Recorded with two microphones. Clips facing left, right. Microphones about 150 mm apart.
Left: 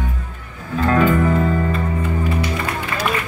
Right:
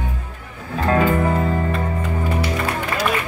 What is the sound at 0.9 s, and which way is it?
Music, 35° right (ahead or behind).